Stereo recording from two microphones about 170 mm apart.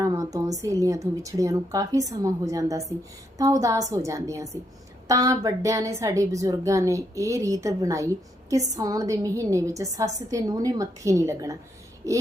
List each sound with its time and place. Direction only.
0.0 s a woman's voice: 20° right (ahead or behind)